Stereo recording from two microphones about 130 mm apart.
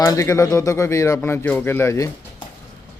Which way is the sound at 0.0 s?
25° left (ahead or behind).